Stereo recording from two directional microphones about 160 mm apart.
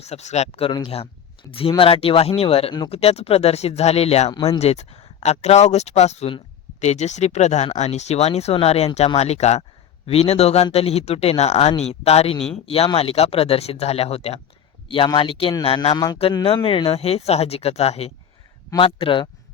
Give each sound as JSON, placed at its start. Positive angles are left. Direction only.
{"t": 0.0, "sound": "speech", "side_deg": 45}
{"t": 0.7, "sound": "speech", "side_deg": 25}